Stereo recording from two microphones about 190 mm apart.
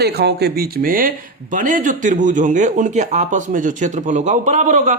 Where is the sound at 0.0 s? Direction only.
60° right (ahead or behind).